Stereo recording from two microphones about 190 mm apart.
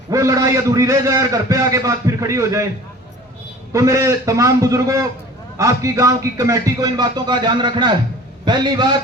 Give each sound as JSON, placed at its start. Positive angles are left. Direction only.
{"t": 0.1, "sound": "a man's voice", "side_deg": -15}
{"t": 3.7, "sound": "a man's voice", "side_deg": -15}